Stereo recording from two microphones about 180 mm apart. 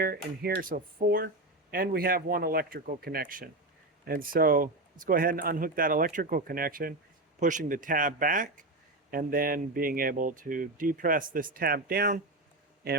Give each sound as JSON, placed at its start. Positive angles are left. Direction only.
{"t": 0.4, "sound": "speech", "side_deg": -50}